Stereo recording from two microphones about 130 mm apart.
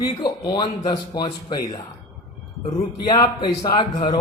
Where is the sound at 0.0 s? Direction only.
35° left (ahead or behind).